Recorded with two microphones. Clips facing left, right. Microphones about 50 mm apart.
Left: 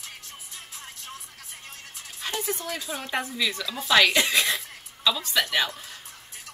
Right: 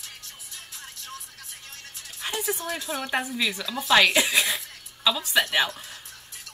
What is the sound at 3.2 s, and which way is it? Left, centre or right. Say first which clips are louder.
A woman's voice: right 1 dB; centre.